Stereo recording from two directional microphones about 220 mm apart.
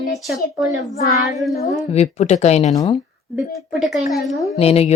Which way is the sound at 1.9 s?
30° left (ahead or behind).